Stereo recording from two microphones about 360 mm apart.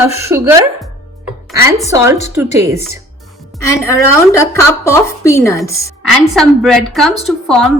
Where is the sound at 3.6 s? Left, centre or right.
Centre.